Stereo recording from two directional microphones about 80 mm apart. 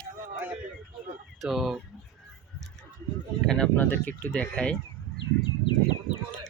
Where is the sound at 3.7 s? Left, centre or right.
Left.